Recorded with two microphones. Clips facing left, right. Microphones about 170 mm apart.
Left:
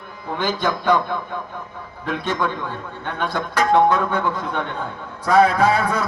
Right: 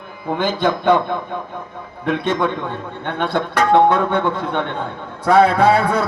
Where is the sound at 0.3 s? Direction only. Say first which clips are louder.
Right 4 dB; 55° right (ahead or behind).